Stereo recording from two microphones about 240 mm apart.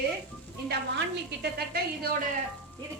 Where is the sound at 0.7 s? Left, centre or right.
Right.